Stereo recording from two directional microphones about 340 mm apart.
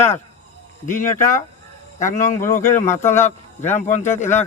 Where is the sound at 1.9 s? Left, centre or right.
Left.